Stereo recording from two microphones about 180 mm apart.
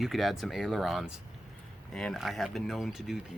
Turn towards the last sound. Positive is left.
turn(degrees=0)  # may be behind; listen again after turning